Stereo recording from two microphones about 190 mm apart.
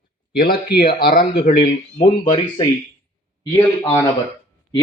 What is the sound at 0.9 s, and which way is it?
Speech, 55° left (ahead or behind).